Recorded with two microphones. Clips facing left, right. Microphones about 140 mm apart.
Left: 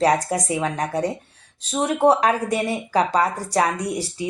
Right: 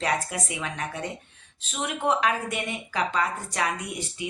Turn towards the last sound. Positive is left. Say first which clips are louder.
# left 8 dB
turn(degrees=35)  # may be behind; listen again after turning